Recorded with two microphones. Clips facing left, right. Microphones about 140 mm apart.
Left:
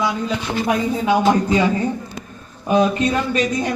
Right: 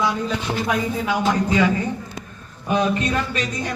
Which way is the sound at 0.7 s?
25° left (ahead or behind).